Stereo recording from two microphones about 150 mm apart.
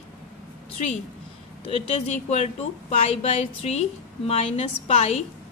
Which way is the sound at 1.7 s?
45° left (ahead or behind).